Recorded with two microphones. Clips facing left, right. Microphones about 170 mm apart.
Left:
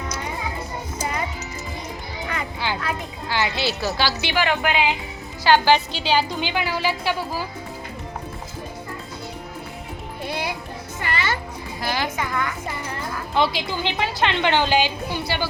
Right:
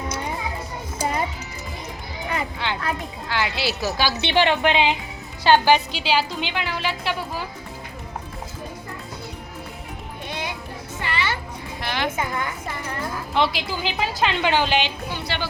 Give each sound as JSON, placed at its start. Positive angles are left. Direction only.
{"t": 2.6, "sound": "a sound", "side_deg": 5}
{"t": 3.2, "sound": "music", "side_deg": 0}
{"t": 3.6, "sound": "a woman's voice", "side_deg": -10}
{"t": 5.5, "sound": "a woman's voice", "side_deg": -15}
{"t": 11.0, "sound": "music", "side_deg": 45}
{"t": 11.8, "sound": "a woman's voice", "side_deg": 5}
{"t": 12.1, "sound": "a woman's voice", "side_deg": -25}
{"t": 13.3, "sound": "a woman's voice", "side_deg": 0}